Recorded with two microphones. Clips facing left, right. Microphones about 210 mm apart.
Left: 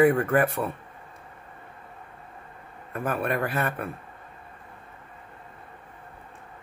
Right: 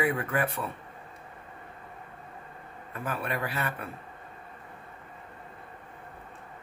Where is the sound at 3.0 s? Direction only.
50° left (ahead or behind).